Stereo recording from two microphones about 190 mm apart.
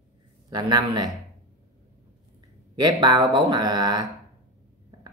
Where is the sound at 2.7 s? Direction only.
20° right (ahead or behind).